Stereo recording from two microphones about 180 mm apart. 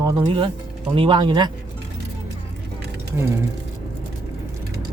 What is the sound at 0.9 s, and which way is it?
Speech, 30° right (ahead or behind).